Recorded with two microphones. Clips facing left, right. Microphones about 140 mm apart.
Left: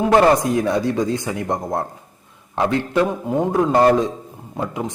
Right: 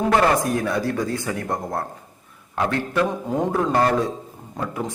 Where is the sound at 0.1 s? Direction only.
20° left (ahead or behind).